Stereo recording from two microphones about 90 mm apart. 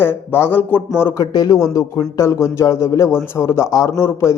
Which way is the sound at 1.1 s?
45° left (ahead or behind).